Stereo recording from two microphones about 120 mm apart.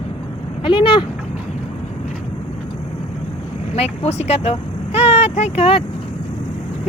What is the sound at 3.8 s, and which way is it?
Speech, 65° left (ahead or behind).